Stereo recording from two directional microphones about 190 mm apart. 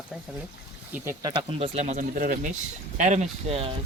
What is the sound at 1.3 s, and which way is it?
Speech, 35° right (ahead or behind).